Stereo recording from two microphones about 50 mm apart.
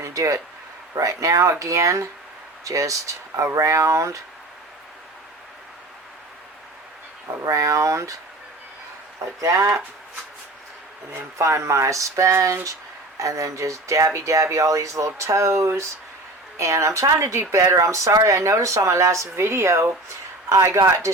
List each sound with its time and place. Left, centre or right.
0.0 s a sound: right
1.0 s speech: right
7.3 s speech: right
9.1 s speech: right
11.1 s speech: right
16.6 s speech: right
20.5 s speech: right